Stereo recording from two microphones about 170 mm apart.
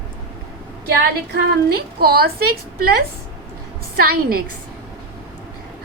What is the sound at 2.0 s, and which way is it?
Speech, 65° right (ahead or behind).